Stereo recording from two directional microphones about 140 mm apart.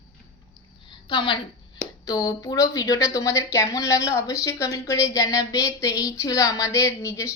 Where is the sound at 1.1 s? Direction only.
35° left (ahead or behind).